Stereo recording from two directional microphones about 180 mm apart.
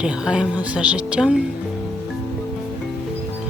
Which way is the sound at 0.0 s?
5° right (ahead or behind).